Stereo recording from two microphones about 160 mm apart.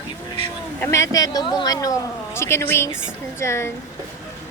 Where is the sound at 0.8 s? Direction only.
20° left (ahead or behind).